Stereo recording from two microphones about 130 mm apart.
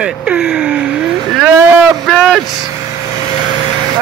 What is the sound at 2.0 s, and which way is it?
Speech, centre (ahead or behind).